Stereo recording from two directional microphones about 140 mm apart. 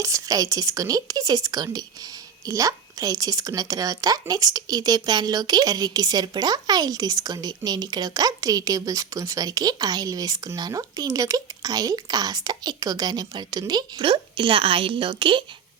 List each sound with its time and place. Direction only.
0.0 s speech: 25° right (ahead or behind)